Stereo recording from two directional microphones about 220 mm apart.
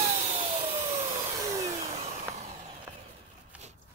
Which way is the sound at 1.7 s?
30° right (ahead or behind).